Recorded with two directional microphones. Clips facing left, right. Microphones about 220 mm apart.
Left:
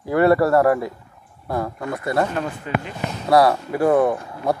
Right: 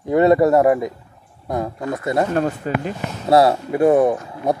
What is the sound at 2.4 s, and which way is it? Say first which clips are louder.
Speech: right 6 dB; 40° right (ahead or behind).